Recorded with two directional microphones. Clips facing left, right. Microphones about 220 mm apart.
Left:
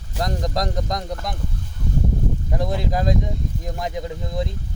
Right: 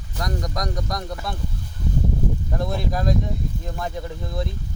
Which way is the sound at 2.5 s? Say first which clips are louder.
Left 4 dB; 15° left (ahead or behind).